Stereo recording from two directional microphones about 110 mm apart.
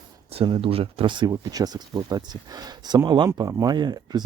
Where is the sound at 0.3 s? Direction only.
55° right (ahead or behind).